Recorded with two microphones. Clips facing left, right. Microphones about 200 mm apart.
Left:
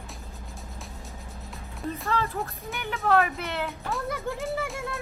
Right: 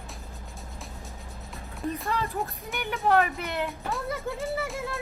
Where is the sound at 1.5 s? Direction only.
Centre (ahead or behind).